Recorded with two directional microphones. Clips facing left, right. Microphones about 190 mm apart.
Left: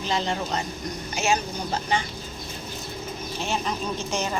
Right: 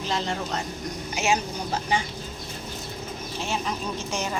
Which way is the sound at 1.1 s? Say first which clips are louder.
Even; 10° right (ahead or behind).